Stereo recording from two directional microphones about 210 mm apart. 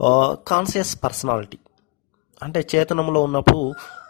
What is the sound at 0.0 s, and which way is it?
Speech, 35° left (ahead or behind).